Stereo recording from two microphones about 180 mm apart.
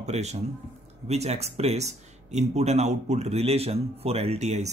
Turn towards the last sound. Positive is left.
turn(degrees=-40)  # may be behind; listen again after turning